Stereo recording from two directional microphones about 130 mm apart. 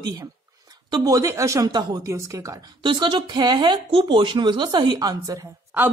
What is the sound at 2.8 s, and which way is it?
A woman's voice, 35° right (ahead or behind).